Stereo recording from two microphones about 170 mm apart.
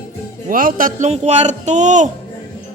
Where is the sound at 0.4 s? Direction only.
55° right (ahead or behind).